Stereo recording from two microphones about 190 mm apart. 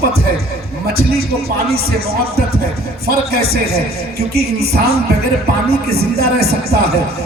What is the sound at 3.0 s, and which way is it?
Speech, 55° right (ahead or behind).